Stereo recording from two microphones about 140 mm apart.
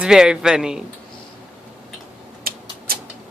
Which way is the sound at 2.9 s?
90° right.